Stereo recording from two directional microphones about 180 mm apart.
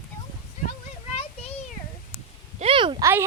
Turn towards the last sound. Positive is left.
turn(degrees=-15)  # may be behind; listen again after turning